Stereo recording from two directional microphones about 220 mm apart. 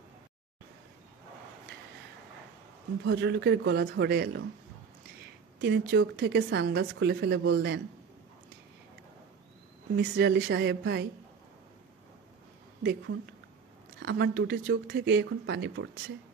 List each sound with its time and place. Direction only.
3.0 s speech: 55° right (ahead or behind)
5.6 s speech: 50° right (ahead or behind)
9.9 s speech: 50° right (ahead or behind)
13.9 s speech: 50° right (ahead or behind)